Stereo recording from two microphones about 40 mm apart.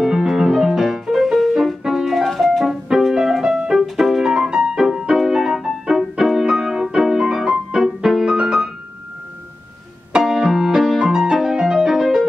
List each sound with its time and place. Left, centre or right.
0.0 s piano: centre
1.1 s music: centre
10.2 s piano: centre
11.1 s music: centre